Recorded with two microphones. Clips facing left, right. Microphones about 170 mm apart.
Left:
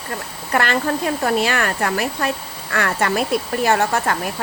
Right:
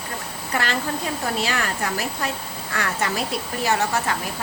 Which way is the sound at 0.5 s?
60° left (ahead or behind).